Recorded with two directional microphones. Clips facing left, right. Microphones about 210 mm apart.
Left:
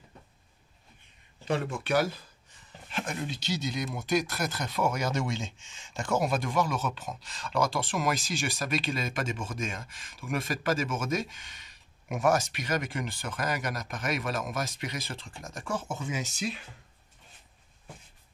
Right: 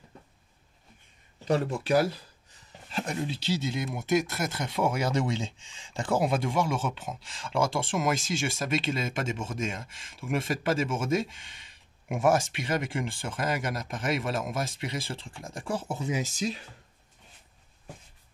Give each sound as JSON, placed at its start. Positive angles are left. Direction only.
{"t": 1.4, "sound": "speech", "side_deg": -40}